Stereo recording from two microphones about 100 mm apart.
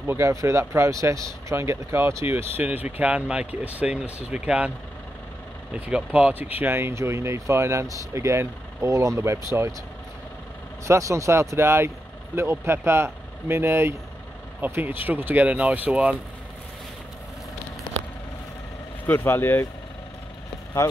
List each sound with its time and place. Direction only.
0.0 s speech: 25° right (ahead or behind)
10.9 s speech: 30° right (ahead or behind); by 16.2 s 15° right (ahead or behind)
19.0 s speech: 20° left (ahead or behind)